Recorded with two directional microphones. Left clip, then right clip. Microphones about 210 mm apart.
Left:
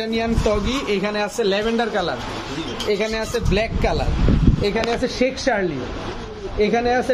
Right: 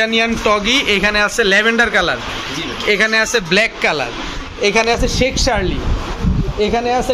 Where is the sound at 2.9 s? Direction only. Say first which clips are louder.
Right 9 dB; centre (ahead or behind).